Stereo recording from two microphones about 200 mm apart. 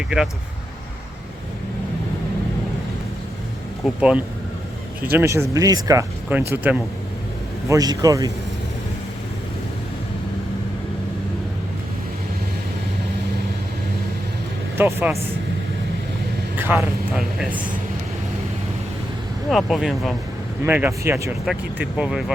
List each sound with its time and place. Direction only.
3.8 s a man's voice: 5° right (ahead or behind)
14.8 s speech: 10° right (ahead or behind)
16.6 s speech: 5° right (ahead or behind)
19.5 s speech: centre (ahead or behind)